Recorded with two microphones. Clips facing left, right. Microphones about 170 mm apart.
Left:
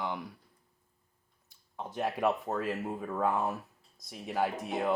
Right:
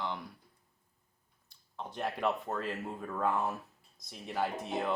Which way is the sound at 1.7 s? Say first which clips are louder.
Left 3 dB; 10° left (ahead or behind).